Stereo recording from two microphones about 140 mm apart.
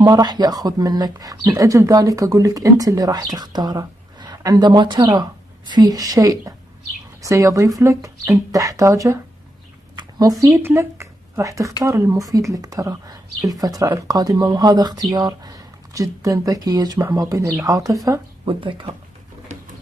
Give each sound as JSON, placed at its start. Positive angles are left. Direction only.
{"t": 0.0, "sound": "speech", "side_deg": -30}
{"t": 9.9, "sound": "a sound", "side_deg": -25}
{"t": 10.6, "sound": "speech", "side_deg": -20}
{"t": 18.4, "sound": "speech", "side_deg": -35}